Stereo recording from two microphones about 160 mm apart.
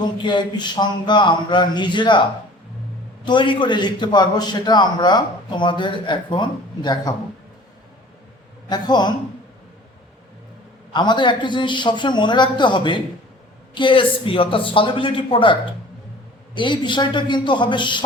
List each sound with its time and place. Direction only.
0.0 s a man's voice: 30° left (ahead or behind)
3.2 s a man's voice: 30° left (ahead or behind)
8.7 s a man's voice: 25° left (ahead or behind)
10.9 s a man's voice: 30° left (ahead or behind)
16.6 s a man's voice: 30° left (ahead or behind)